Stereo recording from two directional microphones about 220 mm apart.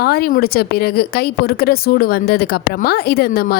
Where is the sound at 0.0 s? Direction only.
45° left (ahead or behind).